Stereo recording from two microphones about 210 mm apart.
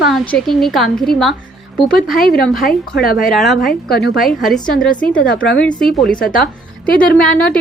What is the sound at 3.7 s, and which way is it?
Speech, 50° left (ahead or behind).